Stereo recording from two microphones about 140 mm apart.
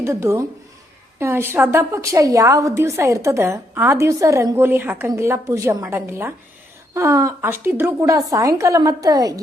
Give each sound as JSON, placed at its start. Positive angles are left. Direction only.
{"t": 0.0, "sound": "a woman's voice", "side_deg": -20}